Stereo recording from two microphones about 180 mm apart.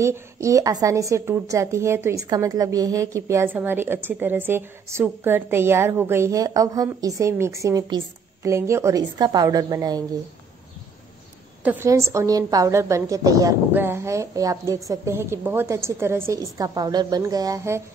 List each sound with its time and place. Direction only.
0.0 s a woman's voice: 15° right (ahead or behind)
11.6 s a woman's voice: 15° right (ahead or behind)